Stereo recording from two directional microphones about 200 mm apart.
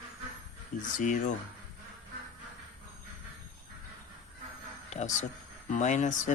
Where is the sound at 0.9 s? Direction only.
40° left (ahead or behind).